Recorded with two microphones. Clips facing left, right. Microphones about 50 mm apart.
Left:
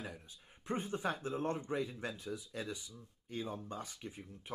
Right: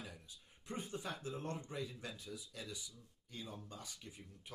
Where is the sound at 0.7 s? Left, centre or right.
Left.